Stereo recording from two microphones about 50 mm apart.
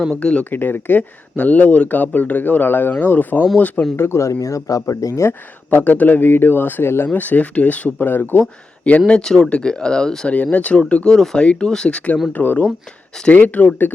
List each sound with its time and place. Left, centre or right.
0.2 s speech: left
0.5 s speech: left
3.9 s speech: left
4.2 s speech: left
5.7 s speech: left
7.9 s speech: left
8.4 s speech: left
10.2 s speech: left
11.1 s speech: centre
11.3 s speech: centre
12.3 s speech: left